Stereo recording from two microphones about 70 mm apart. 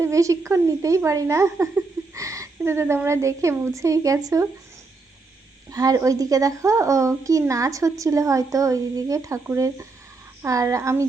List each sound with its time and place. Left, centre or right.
0.0 s speech: right
5.7 s speech: right